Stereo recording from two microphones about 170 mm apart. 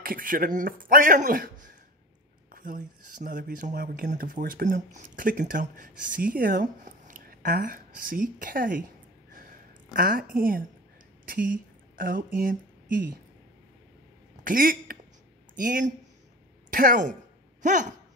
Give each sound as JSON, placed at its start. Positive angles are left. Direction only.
{"t": 0.0, "sound": "speech", "side_deg": -55}
{"t": 9.9, "sound": "a woman's voice", "side_deg": -55}
{"t": 12.0, "sound": "a woman's voice", "side_deg": -55}
{"t": 14.4, "sound": "a woman's voice", "side_deg": -55}